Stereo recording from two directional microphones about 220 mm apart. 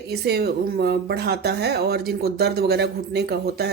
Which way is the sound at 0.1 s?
45° right (ahead or behind).